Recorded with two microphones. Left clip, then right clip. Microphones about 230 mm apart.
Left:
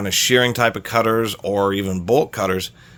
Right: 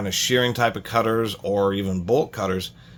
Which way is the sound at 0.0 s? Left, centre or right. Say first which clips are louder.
Left 5 dB; left.